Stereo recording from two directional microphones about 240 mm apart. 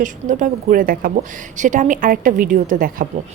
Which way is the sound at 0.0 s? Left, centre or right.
Right.